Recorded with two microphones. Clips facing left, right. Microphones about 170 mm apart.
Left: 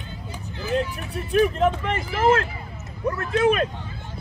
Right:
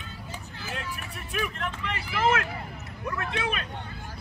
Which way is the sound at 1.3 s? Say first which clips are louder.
Left 14 dB; 35° left (ahead or behind).